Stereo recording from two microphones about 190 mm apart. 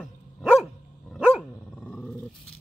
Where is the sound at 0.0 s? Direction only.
5° right (ahead or behind).